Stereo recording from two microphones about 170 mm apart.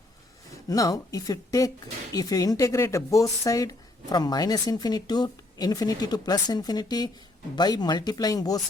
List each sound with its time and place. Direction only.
0.7 s speech: 20° left (ahead or behind)